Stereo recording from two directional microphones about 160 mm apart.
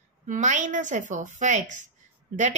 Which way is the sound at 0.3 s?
50° right (ahead or behind).